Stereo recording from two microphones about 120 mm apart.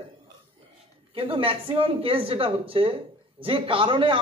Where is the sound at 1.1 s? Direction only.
50° right (ahead or behind).